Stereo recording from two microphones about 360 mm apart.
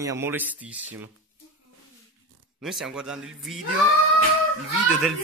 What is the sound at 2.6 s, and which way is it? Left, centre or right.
Speech, centre.